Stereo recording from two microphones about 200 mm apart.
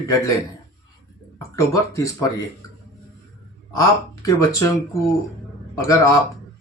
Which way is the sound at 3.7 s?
15° left (ahead or behind).